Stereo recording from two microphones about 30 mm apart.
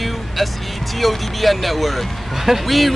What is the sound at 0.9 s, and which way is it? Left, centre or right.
Speech, centre.